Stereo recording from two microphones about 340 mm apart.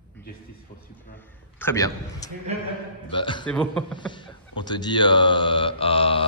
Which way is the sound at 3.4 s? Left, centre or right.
Centre.